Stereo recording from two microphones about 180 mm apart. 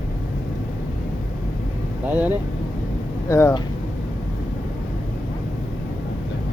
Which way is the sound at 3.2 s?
15° left (ahead or behind).